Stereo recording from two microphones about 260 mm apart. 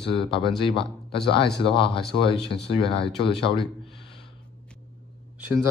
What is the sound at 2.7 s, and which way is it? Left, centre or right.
Speech, centre.